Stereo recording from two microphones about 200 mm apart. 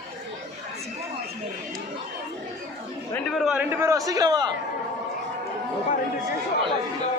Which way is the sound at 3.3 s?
5° right (ahead or behind).